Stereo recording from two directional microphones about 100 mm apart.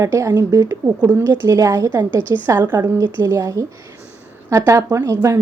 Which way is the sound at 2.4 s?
25° right (ahead or behind).